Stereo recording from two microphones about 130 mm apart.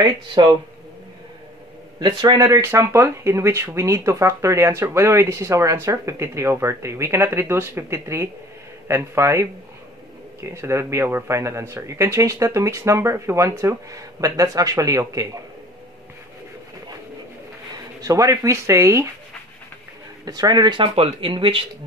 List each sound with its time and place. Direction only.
0.0 s speech: 35° right (ahead or behind)
2.0 s speech: 30° right (ahead or behind)
18.0 s speech: 25° right (ahead or behind)
20.2 s speech: 30° right (ahead or behind)